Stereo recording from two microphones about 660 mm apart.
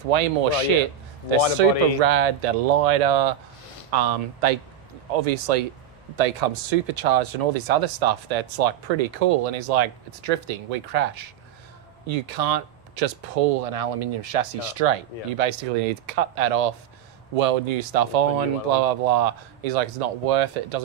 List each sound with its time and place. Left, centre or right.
0.1 s speech: right
1.6 s speech: right
3.9 s speech: right
6.1 s speech: right